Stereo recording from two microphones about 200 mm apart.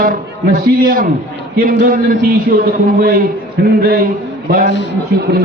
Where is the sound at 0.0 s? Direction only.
45° right (ahead or behind).